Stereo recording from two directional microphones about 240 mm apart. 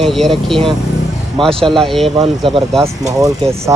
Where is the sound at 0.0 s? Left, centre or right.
Centre.